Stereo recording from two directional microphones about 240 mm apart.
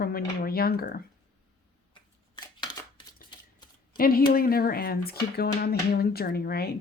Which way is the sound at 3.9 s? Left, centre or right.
Left.